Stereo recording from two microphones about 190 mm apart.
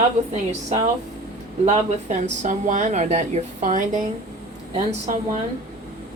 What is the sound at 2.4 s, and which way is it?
A woman's voice, 40° right (ahead or behind).